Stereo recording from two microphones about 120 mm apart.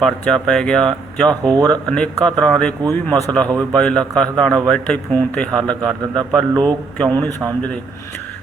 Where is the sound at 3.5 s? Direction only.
30° right (ahead or behind).